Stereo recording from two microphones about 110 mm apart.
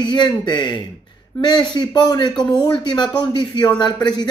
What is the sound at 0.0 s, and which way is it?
Speech, 45° left (ahead or behind).